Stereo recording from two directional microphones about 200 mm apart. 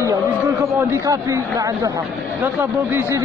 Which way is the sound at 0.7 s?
15° right (ahead or behind).